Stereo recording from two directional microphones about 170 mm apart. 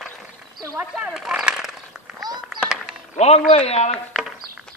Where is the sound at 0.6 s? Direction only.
20° right (ahead or behind).